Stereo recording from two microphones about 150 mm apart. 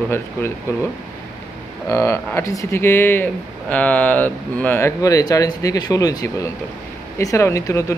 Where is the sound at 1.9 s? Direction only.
20° left (ahead or behind).